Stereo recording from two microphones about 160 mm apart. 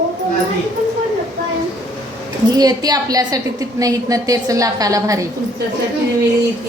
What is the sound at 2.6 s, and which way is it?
A woman's voice, 25° right (ahead or behind).